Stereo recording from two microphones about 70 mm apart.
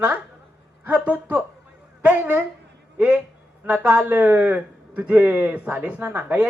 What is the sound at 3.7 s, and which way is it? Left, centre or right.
A woman's voice, right.